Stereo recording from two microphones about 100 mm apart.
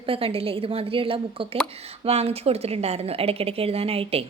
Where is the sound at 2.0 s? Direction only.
90° right.